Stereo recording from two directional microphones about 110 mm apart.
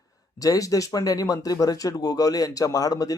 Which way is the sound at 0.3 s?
30° left (ahead or behind).